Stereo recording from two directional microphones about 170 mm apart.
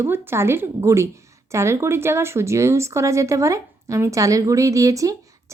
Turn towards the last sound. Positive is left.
turn(degrees=-20)  # may be behind; listen again after turning